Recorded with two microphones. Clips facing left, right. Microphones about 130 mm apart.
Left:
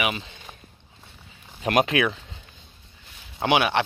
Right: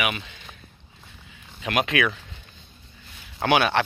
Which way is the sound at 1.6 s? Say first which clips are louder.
Left 3 dB; 40° left (ahead or behind).